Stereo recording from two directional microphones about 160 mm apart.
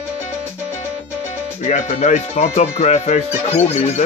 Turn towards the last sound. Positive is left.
turn(degrees=40)  # may be behind; listen again after turning